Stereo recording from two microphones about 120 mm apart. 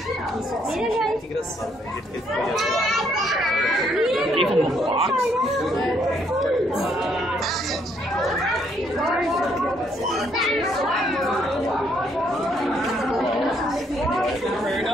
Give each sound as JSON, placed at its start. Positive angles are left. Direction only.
{"t": 2.5, "sound": "speech", "side_deg": 0}
{"t": 4.8, "sound": "speech", "side_deg": -55}
{"t": 10.3, "sound": "speech", "side_deg": 0}
{"t": 12.6, "sound": "chatter", "side_deg": 0}